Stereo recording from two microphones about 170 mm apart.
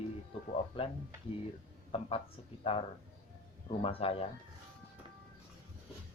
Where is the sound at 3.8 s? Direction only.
35° left (ahead or behind).